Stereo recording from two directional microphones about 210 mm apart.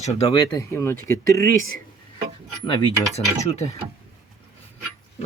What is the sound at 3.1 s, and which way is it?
Speech, 30° left (ahead or behind).